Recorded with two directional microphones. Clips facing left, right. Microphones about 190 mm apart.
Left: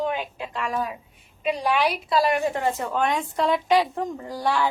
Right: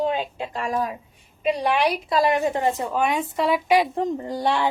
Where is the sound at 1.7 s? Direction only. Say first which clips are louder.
Right 1 dB; 25° right (ahead or behind).